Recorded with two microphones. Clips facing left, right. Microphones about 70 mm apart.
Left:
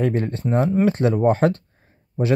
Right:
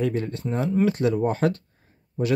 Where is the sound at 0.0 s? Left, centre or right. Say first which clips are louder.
Left 4 dB; left.